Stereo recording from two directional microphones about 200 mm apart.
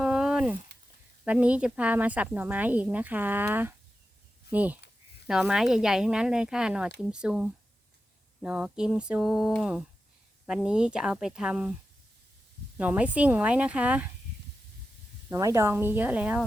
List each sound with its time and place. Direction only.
0.0 s a sound: 5° right (ahead or behind)
1.2 s speech: 5° right (ahead or behind)
12.7 s speech: 5° right (ahead or behind)
15.3 s speech: 15° right (ahead or behind)